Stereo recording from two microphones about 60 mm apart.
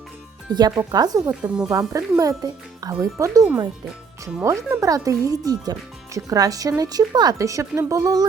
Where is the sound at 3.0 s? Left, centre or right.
Right.